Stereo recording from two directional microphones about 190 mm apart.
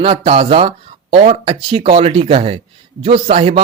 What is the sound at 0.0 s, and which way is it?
Speech, 30° right (ahead or behind).